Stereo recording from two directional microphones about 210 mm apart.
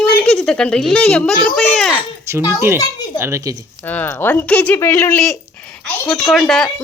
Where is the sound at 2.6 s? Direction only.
10° right (ahead or behind).